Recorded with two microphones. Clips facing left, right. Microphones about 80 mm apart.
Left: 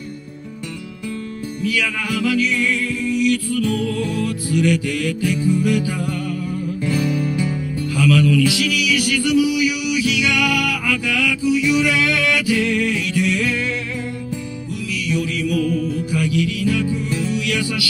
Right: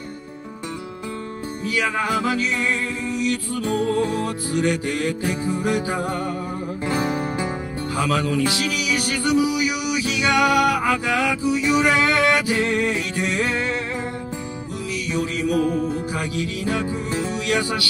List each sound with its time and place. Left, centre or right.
1.6 s music: right
15.0 s music: right